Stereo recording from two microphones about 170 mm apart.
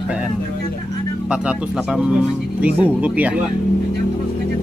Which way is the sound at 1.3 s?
5° right (ahead or behind).